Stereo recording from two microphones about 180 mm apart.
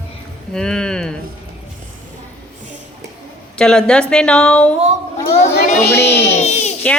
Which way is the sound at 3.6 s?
5° left (ahead or behind).